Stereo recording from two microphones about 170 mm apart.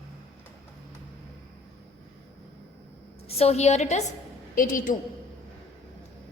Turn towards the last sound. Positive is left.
turn(degrees=50)  # may be behind; listen again after turning